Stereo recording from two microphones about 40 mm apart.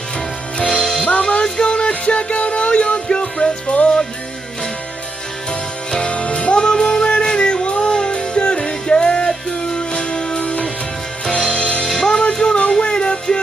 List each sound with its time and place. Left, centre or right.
0.7 s music: centre
5.9 s music: left
11.5 s music: left
11.9 s music: centre